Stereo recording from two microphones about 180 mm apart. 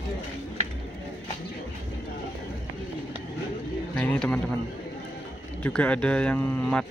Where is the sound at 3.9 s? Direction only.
5° left (ahead or behind).